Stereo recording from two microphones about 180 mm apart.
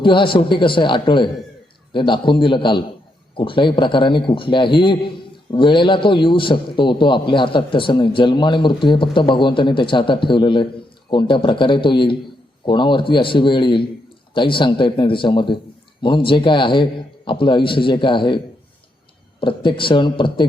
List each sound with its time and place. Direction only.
0.0 s a man's voice: 30° left (ahead or behind)
19.4 s a man's voice: 30° left (ahead or behind)